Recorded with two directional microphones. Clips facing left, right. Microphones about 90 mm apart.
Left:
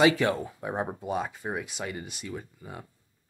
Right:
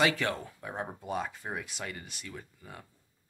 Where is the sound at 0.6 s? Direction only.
20° left (ahead or behind).